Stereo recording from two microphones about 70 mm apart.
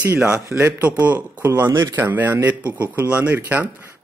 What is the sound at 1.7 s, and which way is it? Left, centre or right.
Speech, right.